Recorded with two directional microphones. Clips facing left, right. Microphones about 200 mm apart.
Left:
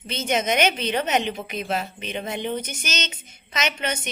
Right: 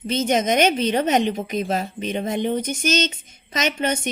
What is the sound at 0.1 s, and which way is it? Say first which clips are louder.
A woman's voice: right 4 dB; 45° right (ahead or behind).